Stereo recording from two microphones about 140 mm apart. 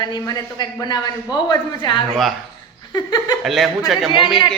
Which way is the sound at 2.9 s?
30° left (ahead or behind).